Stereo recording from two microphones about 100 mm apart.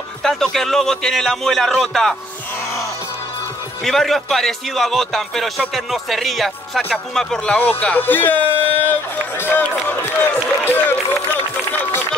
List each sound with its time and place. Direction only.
0.2 s speech: 5° left (ahead or behind)
3.8 s speech: 5° left (ahead or behind); by 8.9 s 20° left (ahead or behind)
9.4 s run: 20° left (ahead or behind)